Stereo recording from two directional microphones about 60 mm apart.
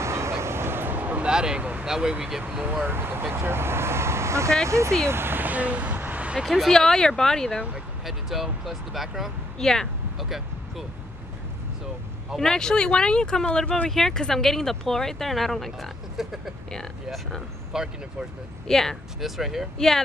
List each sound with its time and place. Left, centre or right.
0.0 s a sound: right
1.3 s speech: centre
2.6 s speech: right
5.0 s a sound: right
6.4 s speech: centre
6.7 s speech: centre
8.0 s speech: centre
9.6 s speech: centre
10.1 s vehicle: centre
12.4 s speech: centre
16.7 s speech: centre
17.7 s speech: centre
18.7 s speech: centre
19.1 s speech: centre